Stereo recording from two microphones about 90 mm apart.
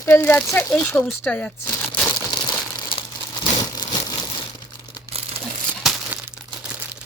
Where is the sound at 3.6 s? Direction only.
50° left (ahead or behind).